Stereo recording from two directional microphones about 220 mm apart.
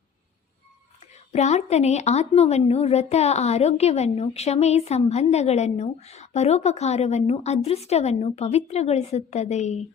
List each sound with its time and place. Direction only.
1.3 s a woman's voice: 30° left (ahead or behind)